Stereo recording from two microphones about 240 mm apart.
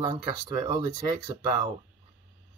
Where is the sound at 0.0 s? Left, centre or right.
Centre.